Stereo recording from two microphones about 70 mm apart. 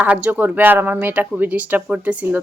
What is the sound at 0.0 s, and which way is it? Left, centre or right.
Speech, right.